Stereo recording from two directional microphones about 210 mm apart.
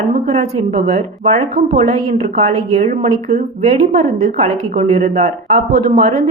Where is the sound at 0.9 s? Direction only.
30° right (ahead or behind).